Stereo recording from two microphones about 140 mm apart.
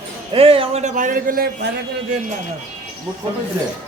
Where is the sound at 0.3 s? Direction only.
40° right (ahead or behind); by 1.5 s 85° right.